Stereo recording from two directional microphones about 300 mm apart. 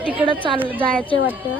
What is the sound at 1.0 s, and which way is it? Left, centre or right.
Speech, centre.